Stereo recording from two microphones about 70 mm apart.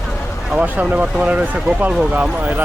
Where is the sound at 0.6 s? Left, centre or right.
Right.